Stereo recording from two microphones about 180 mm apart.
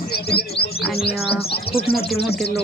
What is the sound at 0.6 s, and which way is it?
Chirp, 60° left (ahead or behind).